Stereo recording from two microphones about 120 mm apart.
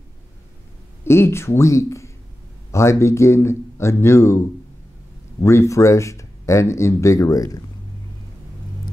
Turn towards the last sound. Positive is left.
turn(degrees=30)  # may be behind; listen again after turning